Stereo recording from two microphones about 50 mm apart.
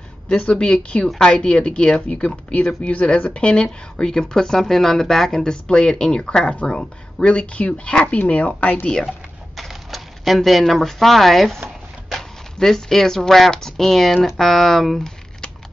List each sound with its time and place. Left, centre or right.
0.4 s speech: left
8.2 s speech: left
9.6 s typewriter: centre
10.6 s speech: centre